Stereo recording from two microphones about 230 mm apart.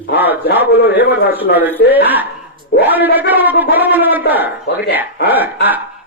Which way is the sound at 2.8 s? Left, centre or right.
Centre.